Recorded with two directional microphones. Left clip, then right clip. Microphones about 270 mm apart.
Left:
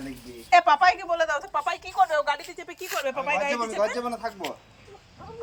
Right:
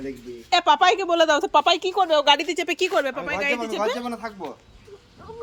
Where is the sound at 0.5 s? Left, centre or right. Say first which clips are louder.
Right 1 dB; centre.